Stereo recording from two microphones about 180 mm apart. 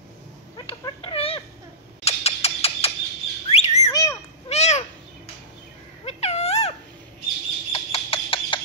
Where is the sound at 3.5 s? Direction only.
35° left (ahead or behind).